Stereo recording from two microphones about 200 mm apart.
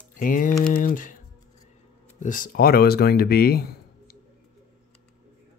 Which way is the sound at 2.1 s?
40° left (ahead or behind).